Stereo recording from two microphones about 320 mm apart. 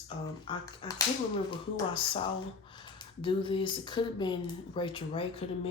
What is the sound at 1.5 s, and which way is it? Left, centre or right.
Speech, centre.